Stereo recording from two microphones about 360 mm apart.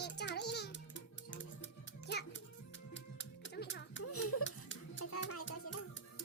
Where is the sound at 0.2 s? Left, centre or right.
Left.